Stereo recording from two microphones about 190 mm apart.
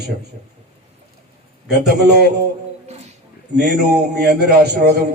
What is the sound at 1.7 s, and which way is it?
Speech, 55° right (ahead or behind).